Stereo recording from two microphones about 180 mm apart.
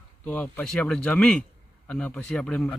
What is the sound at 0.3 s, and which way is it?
Speech, 10° left (ahead or behind).